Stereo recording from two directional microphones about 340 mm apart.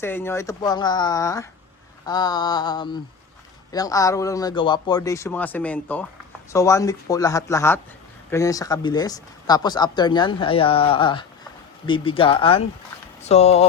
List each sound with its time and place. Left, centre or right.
0.0 s speech: centre